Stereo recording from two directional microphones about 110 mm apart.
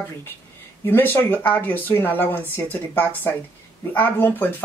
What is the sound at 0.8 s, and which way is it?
Speech, 20° left (ahead or behind).